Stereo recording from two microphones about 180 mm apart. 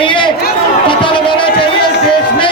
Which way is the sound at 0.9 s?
25° left (ahead or behind).